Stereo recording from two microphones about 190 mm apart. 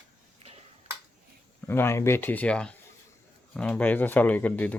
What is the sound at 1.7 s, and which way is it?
Speech, 10° left (ahead or behind).